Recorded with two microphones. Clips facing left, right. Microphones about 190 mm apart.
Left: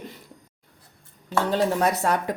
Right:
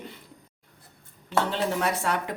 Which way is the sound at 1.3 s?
40° left (ahead or behind).